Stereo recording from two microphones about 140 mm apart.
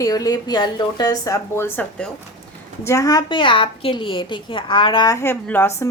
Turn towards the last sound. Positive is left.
turn(degrees=15)  # may be behind; listen again after turning